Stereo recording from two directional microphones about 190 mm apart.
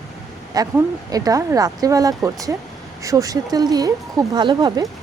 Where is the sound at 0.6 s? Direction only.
20° right (ahead or behind).